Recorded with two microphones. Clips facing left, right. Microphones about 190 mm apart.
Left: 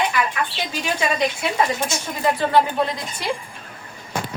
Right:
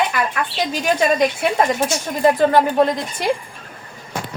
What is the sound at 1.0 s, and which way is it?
Speech, 45° right (ahead or behind).